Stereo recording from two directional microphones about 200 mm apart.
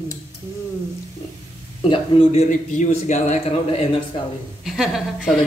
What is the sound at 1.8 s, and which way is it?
A man's voice, 25° left (ahead or behind).